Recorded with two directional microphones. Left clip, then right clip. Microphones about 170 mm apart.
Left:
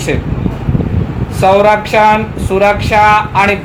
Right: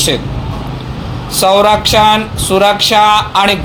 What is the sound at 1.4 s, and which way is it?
Speech, 50° right (ahead or behind).